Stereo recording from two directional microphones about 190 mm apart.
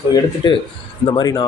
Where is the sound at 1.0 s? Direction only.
25° left (ahead or behind).